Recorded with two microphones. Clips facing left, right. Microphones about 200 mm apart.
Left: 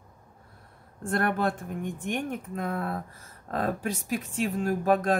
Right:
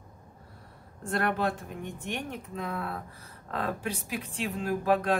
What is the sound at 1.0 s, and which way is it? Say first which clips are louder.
Speech: left 2 dB; 50° left (ahead or behind).